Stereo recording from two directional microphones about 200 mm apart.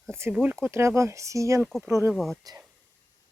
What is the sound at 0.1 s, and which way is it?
Speech, 15° right (ahead or behind).